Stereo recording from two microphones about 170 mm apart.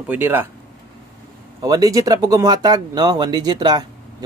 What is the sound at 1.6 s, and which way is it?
Speech, 20° right (ahead or behind).